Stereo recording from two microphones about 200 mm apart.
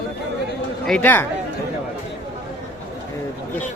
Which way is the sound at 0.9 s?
10° left (ahead or behind).